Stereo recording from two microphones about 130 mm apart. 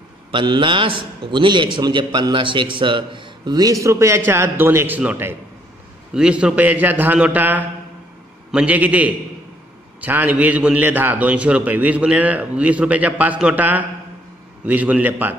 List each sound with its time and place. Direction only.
0.3 s a man's voice: 40° right (ahead or behind); by 15.3 s 15° right (ahead or behind)